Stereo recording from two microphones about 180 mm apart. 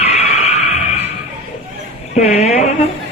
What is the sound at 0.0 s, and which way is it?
Music, 35° left (ahead or behind).